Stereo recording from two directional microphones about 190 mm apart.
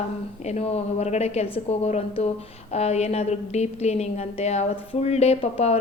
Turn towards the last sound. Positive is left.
turn(degrees=35)  # may be behind; listen again after turning